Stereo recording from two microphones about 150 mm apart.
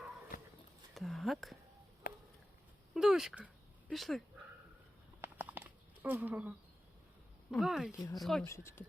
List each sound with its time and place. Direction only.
0.9 s speech: centre (ahead or behind)
2.0 s a sound: 90° left
2.9 s speech: 5° right (ahead or behind)
5.2 s a sound: 15° right (ahead or behind)
7.5 s speech: centre (ahead or behind)
7.9 s speech: 25° left (ahead or behind)
8.2 s speech: centre (ahead or behind)
8.4 s speech: 15° left (ahead or behind)